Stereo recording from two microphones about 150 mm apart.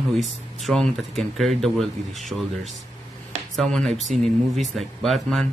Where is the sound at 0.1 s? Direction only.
Centre (ahead or behind).